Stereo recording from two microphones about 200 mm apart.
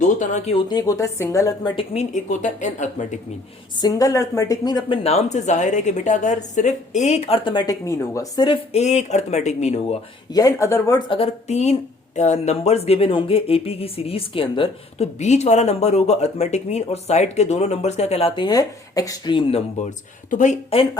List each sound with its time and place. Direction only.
0.0 s speech: 35° left (ahead or behind)
0.7 s a woman's voice: 20° left (ahead or behind); by 3.2 s 35° left (ahead or behind)
3.8 s a woman's voice: 20° left (ahead or behind)
5.0 s speech: 35° left (ahead or behind)
10.3 s speech: 15° left (ahead or behind); by 20.8 s 35° left (ahead or behind)